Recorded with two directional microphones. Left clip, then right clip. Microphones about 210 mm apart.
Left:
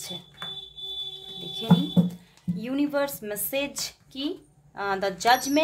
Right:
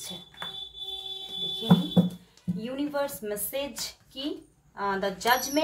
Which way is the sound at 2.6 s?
55° left (ahead or behind).